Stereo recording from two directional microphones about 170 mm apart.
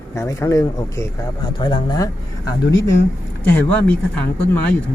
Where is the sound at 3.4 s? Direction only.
10° left (ahead or behind).